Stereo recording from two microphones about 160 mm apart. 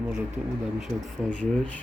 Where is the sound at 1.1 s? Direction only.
5° left (ahead or behind).